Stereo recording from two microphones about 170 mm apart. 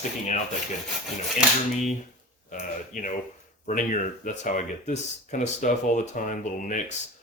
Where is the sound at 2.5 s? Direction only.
50° left (ahead or behind).